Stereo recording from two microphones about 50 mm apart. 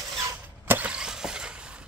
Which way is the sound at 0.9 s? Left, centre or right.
Centre.